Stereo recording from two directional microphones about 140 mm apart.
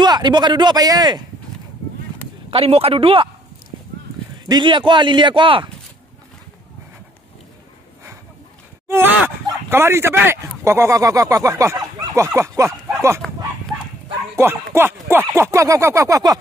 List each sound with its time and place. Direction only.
0.0 s a man's voice: 30° right (ahead or behind)
2.5 s a man's voice: 45° right (ahead or behind)
4.5 s a man's voice: 35° right (ahead or behind)
8.8 s speech: 15° right (ahead or behind)
14.4 s speech: 20° right (ahead or behind)